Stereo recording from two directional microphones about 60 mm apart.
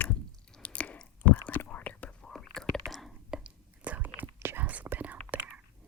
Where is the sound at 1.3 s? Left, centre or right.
Left.